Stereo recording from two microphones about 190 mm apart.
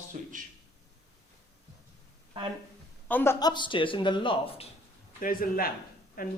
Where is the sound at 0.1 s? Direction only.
45° right (ahead or behind).